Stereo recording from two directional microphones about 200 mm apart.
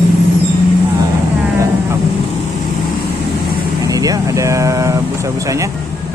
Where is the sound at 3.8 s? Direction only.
15° right (ahead or behind).